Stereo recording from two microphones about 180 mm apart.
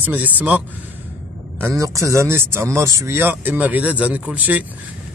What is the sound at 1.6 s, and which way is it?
Speech, 20° right (ahead or behind).